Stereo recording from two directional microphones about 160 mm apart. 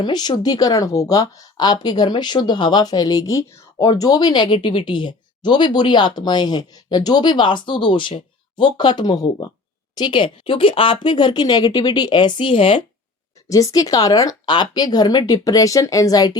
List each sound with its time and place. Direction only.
0.0 s a woman's voice: 25° left (ahead or behind)
13.5 s a woman's voice: 20° left (ahead or behind)